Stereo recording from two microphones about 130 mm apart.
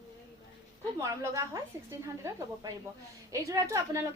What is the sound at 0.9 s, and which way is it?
Speech, 25° right (ahead or behind).